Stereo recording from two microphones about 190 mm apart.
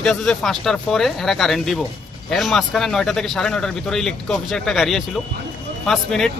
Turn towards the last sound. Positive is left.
turn(degrees=0)  # may be behind; listen again after turning